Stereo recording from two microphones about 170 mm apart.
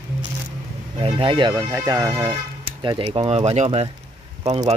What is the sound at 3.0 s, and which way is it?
Speech, 35° right (ahead or behind).